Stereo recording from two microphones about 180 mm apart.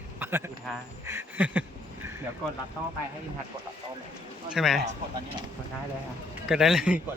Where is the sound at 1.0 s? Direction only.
10° right (ahead or behind).